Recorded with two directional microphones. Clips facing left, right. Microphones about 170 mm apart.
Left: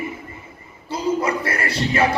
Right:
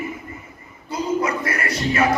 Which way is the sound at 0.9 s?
30° left (ahead or behind).